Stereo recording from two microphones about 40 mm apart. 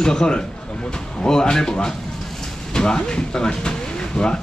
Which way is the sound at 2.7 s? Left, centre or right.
Centre.